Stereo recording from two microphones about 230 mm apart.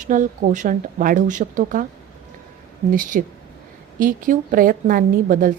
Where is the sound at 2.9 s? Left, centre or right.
Right.